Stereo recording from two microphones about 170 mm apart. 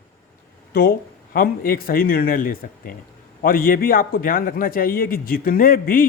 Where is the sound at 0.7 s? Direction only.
60° left (ahead or behind).